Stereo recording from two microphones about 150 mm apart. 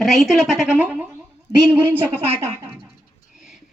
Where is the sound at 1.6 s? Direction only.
10° right (ahead or behind).